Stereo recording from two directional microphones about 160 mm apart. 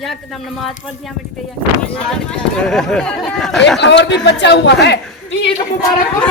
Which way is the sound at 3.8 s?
90° left.